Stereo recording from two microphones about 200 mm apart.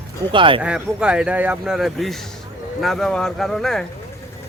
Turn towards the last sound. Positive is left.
turn(degrees=0)  # may be behind; listen again after turning